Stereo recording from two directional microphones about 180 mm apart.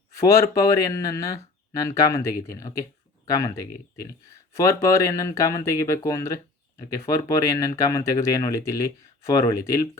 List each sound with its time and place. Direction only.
0.2 s speech: 15° left (ahead or behind)